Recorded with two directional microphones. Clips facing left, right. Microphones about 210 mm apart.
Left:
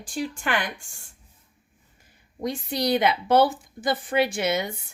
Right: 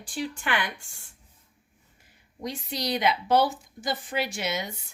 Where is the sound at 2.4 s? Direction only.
55° left (ahead or behind).